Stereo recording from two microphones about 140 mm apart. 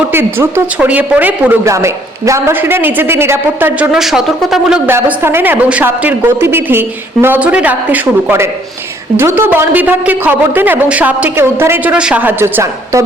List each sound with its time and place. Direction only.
0.1 s a man's voice: 15° right (ahead or behind)
3.9 s speech: centre (ahead or behind)
4.9 s a man's voice: 15° right (ahead or behind)